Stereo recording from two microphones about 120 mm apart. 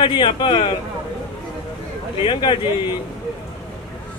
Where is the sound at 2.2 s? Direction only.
40° left (ahead or behind).